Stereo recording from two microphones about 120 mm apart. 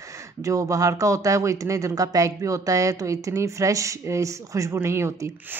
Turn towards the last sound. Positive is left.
turn(degrees=-20)  # may be behind; listen again after turning